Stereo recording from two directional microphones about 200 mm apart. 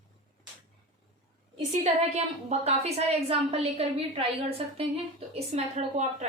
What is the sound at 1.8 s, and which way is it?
A woman's voice, 30° right (ahead or behind).